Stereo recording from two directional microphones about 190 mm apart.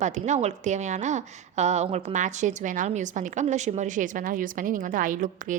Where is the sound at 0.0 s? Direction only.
40° right (ahead or behind).